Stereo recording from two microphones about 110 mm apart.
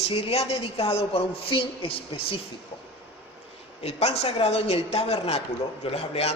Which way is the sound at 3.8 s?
75° left (ahead or behind).